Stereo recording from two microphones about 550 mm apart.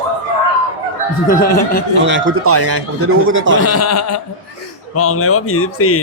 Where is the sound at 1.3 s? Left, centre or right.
Centre.